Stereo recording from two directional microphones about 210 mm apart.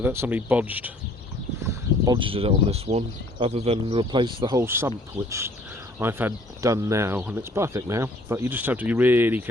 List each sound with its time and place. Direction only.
0.0 s speech: 10° right (ahead or behind)
2.0 s speech: 25° right (ahead or behind)